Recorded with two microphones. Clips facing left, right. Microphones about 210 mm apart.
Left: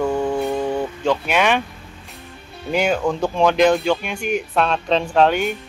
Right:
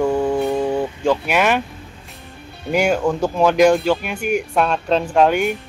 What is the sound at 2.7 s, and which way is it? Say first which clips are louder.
Speech: right 2 dB; 10° right (ahead or behind).